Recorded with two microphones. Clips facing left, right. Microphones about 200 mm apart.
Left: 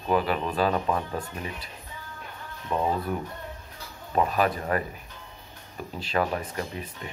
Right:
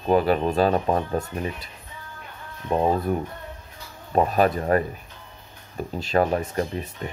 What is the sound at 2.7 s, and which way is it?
Speech, 40° right (ahead or behind).